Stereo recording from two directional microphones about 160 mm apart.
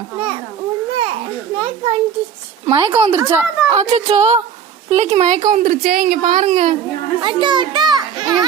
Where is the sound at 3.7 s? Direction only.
40° right (ahead or behind).